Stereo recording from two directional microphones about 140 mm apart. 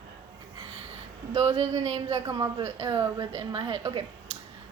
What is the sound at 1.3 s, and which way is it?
Speech, 50° right (ahead or behind).